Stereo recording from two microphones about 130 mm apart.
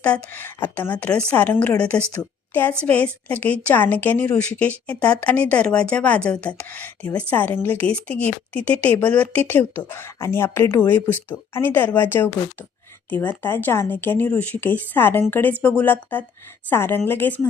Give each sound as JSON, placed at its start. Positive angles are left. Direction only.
{"t": 0.0, "sound": "a woman's voice", "side_deg": 10}